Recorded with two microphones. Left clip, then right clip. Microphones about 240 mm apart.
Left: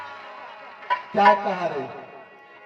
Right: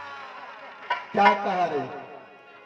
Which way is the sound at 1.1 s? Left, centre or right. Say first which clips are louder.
Left 3 dB; left.